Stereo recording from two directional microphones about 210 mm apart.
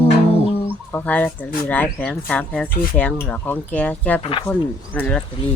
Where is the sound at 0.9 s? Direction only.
5° left (ahead or behind).